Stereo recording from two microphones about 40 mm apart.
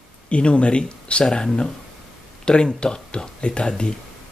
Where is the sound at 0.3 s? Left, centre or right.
Left.